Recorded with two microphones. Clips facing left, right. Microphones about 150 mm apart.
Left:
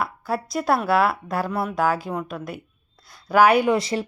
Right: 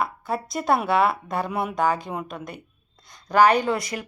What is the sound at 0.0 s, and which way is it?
A woman's voice, centre (ahead or behind).